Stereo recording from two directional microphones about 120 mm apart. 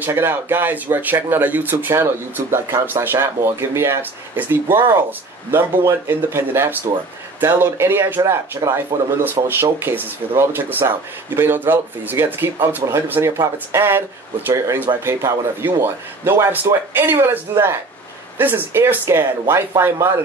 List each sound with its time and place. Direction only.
0.0 s speech: 20° right (ahead or behind)